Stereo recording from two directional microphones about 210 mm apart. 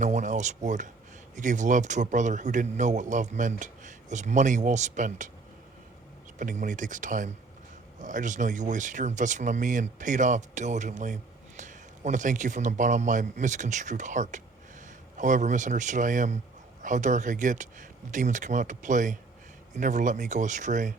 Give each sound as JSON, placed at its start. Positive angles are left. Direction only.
{"t": 0.0, "sound": "speech", "side_deg": -35}
{"t": 6.4, "sound": "speech", "side_deg": -40}